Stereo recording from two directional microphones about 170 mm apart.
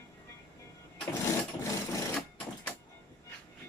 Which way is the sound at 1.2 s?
20° left (ahead or behind).